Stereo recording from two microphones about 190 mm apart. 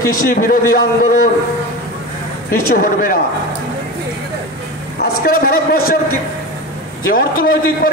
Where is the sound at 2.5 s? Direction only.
50° left (ahead or behind).